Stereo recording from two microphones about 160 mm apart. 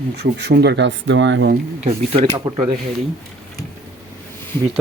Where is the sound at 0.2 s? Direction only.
90° right.